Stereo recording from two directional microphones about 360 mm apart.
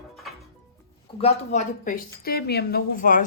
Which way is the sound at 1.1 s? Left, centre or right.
Centre.